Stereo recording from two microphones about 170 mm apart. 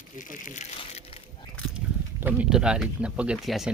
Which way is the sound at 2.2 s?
5° right (ahead or behind).